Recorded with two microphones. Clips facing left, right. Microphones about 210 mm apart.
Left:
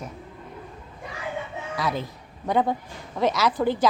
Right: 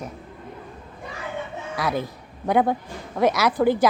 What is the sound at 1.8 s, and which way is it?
A woman's voice, 10° right (ahead or behind).